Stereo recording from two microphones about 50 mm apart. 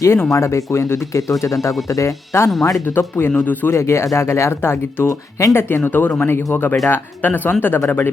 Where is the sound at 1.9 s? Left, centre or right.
Left.